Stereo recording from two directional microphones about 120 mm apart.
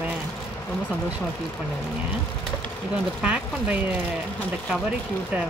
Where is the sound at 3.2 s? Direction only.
10° right (ahead or behind).